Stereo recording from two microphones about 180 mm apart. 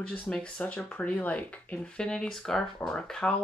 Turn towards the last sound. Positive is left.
turn(degrees=5)  # may be behind; listen again after turning